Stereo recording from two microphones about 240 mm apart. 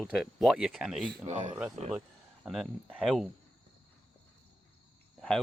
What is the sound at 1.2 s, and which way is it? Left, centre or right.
Speech, right.